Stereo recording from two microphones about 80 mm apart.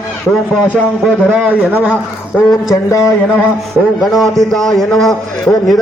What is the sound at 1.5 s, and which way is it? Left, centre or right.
Speech, centre.